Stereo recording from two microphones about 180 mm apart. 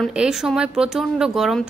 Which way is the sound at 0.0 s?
5° right (ahead or behind).